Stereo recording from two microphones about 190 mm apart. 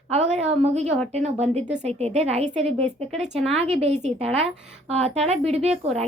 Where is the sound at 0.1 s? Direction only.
35° right (ahead or behind).